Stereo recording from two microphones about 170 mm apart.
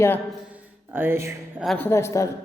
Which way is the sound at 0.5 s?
10° right (ahead or behind).